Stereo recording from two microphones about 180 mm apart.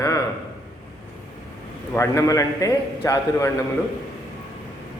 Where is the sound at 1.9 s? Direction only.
15° left (ahead or behind).